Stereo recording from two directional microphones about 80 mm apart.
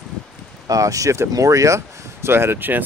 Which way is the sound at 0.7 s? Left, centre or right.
Right.